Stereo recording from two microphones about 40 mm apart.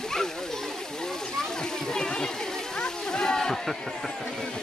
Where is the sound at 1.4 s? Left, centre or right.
Centre.